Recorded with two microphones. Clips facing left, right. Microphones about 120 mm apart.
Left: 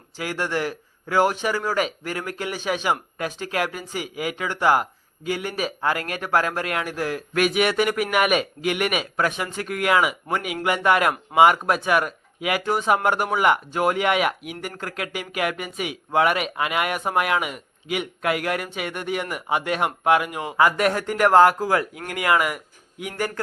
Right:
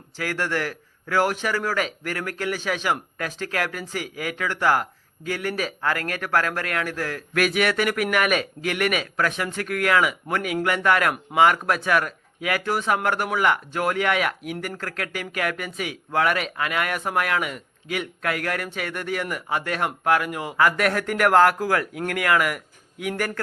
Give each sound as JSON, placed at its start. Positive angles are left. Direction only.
{"t": 0.2, "sound": "a man's voice", "side_deg": 15}
{"t": 2.6, "sound": "a man's voice", "side_deg": 5}
{"t": 7.3, "sound": "a man's voice", "side_deg": 5}
{"t": 11.6, "sound": "a man's voice", "side_deg": 10}
{"t": 13.3, "sound": "speech", "side_deg": 20}